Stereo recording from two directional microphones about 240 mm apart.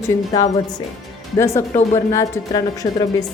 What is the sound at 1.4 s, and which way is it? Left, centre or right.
A woman's voice, centre.